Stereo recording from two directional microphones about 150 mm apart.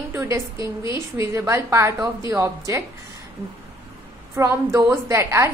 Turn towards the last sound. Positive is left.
turn(degrees=-20)  # may be behind; listen again after turning